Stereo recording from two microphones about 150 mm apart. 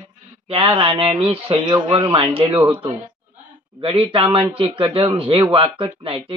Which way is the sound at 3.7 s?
35° right (ahead or behind).